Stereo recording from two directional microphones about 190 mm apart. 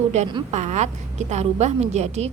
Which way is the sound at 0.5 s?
40° right (ahead or behind).